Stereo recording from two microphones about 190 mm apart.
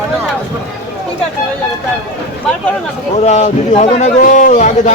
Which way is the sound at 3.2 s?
35° left (ahead or behind).